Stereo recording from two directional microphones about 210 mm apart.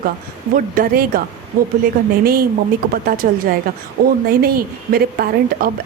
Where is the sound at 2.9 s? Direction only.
45° right (ahead or behind).